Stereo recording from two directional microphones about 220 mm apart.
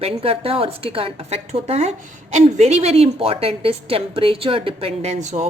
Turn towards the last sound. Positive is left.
turn(degrees=-30)  # may be behind; listen again after turning